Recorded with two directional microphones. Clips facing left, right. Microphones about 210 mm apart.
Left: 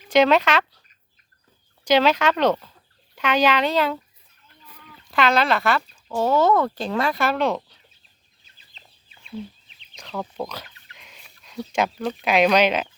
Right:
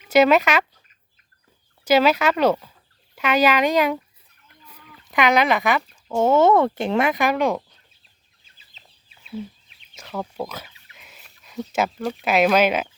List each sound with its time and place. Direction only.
0.1 s speech: 10° right (ahead or behind)
1.8 s speech: 5° right (ahead or behind)
9.9 s speech: 10° right (ahead or behind)